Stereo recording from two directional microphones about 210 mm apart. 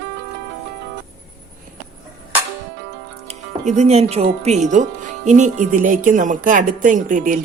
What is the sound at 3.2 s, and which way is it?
Speech, 35° right (ahead or behind).